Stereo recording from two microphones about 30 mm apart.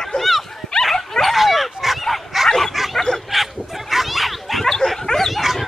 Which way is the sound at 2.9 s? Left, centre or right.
Centre.